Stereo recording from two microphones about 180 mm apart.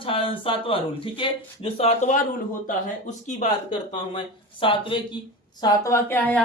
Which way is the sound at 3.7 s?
30° left (ahead or behind).